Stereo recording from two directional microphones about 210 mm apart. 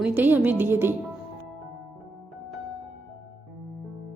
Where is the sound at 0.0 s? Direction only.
5° right (ahead or behind).